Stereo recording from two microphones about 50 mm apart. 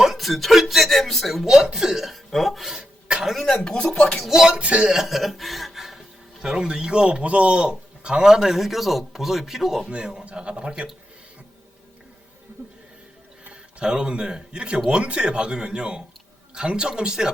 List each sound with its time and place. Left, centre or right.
0.0 s speech: centre
2.7 s cough: centre
3.5 s speech: centre
4.2 s a man's voice: centre
4.4 s speech: right
5.0 s speech: centre
6.4 s a man's voice: centre
9.9 s a man's voice: centre
13.5 s a man's voice: centre